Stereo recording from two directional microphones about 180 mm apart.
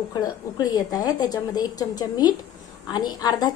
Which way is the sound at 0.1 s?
20° left (ahead or behind).